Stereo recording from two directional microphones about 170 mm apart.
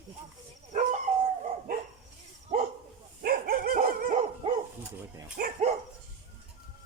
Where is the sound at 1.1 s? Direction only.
40° right (ahead or behind).